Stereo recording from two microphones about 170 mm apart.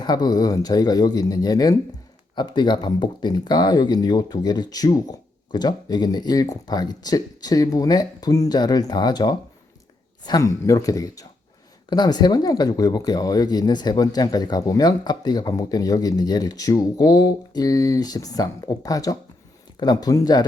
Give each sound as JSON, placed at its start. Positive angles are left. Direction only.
{"t": 0.0, "sound": "speech", "side_deg": 25}